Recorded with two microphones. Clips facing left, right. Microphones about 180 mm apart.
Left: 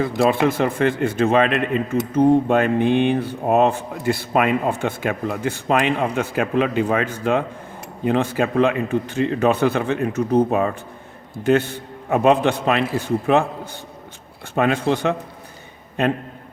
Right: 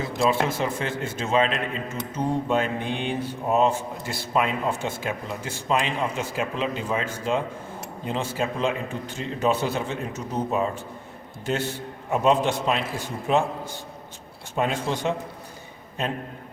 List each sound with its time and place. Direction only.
0.0 s speech: 55° left (ahead or behind)
14.5 s speech: 65° left (ahead or behind)